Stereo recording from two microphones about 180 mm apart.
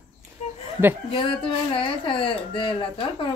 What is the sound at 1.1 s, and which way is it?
Speech, 30° left (ahead or behind).